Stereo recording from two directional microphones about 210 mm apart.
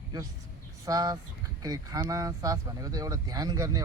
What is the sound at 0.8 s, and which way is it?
Speech, 15° right (ahead or behind).